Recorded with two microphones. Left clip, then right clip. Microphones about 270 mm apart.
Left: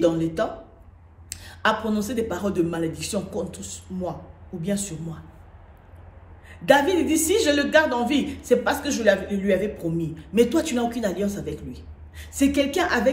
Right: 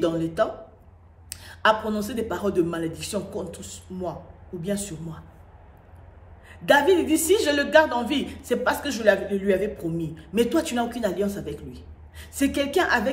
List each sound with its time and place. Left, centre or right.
0.0 s a man's voice: centre
6.5 s a man's voice: centre